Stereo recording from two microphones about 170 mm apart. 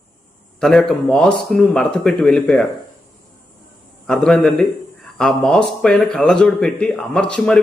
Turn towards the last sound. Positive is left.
turn(degrees=5)  # may be behind; listen again after turning